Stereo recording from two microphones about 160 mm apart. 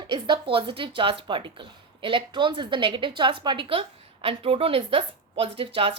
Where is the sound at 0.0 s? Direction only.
30° right (ahead or behind).